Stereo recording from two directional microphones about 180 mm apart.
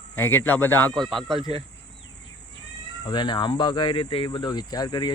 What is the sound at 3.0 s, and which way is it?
Speech, 25° left (ahead or behind).